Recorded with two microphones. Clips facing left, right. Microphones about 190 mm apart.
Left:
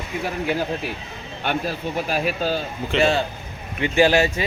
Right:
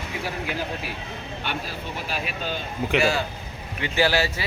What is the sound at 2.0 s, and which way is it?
Speech, 45° left (ahead or behind).